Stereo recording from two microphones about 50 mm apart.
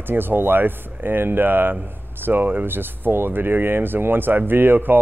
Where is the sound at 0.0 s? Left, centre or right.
Right.